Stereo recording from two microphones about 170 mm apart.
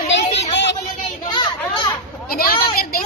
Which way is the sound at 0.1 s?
90° left.